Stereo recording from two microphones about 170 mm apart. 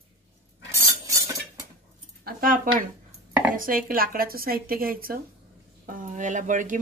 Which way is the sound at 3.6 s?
55° right (ahead or behind).